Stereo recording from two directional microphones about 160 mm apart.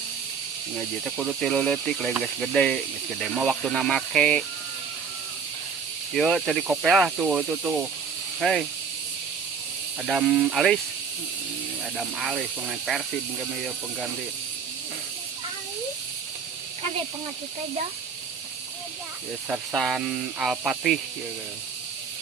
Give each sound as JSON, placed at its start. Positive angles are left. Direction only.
{"t": 0.8, "sound": "speech", "side_deg": -5}
{"t": 6.1, "sound": "speech", "side_deg": 0}
{"t": 10.0, "sound": "speech", "side_deg": -5}
{"t": 11.9, "sound": "speech", "side_deg": -5}
{"t": 19.7, "sound": "speech", "side_deg": 0}